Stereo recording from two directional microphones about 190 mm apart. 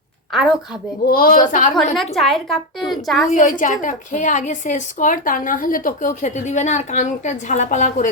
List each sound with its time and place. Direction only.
1.0 s speech: 50° left (ahead or behind)
2.0 s a woman's voice: centre (ahead or behind)
3.2 s a woman's voice: 45° left (ahead or behind)